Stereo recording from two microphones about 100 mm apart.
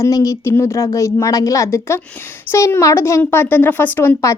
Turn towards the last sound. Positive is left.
turn(degrees=25)  # may be behind; listen again after turning